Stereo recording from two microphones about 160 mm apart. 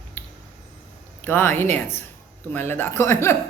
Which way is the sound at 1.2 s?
15° left (ahead or behind).